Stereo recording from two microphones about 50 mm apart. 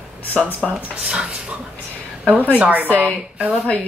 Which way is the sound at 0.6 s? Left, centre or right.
Centre.